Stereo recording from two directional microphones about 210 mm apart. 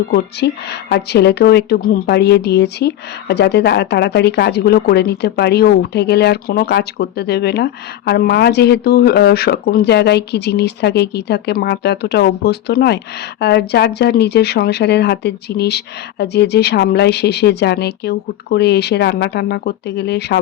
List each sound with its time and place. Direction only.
0.1 s speech: 50° left (ahead or behind)